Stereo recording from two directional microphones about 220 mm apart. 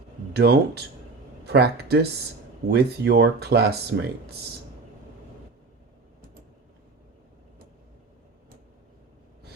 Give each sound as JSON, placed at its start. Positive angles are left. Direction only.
{"t": 0.3, "sound": "speech", "side_deg": -45}